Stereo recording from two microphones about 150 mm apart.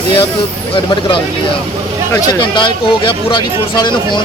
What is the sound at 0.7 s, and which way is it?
Speech, 35° left (ahead or behind).